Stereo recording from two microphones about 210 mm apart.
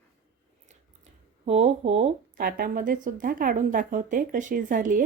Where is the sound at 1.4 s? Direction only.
30° right (ahead or behind).